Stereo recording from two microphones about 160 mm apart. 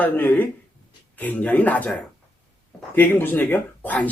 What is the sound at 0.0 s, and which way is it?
Speech, 10° left (ahead or behind).